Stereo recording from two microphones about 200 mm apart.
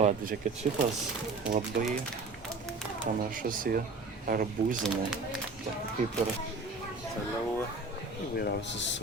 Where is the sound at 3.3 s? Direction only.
45° right (ahead or behind).